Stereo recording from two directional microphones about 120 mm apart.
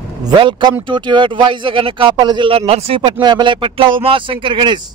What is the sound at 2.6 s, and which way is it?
Speech, 55° right (ahead or behind).